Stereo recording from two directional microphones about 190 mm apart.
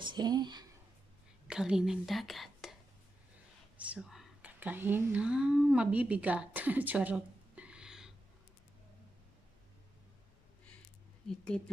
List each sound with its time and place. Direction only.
0.0 s speech: 20° right (ahead or behind)
1.5 s a woman's voice: 5° right (ahead or behind)
3.7 s speech: 5° right (ahead or behind)
11.2 s speech: 5° left (ahead or behind)